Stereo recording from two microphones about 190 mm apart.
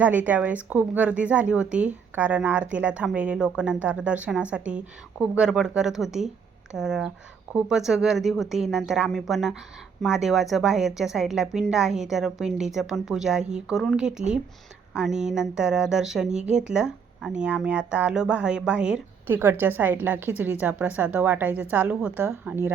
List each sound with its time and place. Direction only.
0.0 s a woman's voice: 10° right (ahead or behind)
16.4 s speech: 40° right (ahead or behind)
16.6 s speech: 5° right (ahead or behind)